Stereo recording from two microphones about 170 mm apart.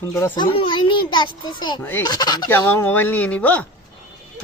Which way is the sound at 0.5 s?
30° left (ahead or behind).